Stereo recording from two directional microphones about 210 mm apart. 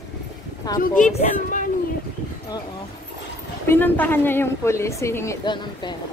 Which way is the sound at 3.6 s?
10° left (ahead or behind).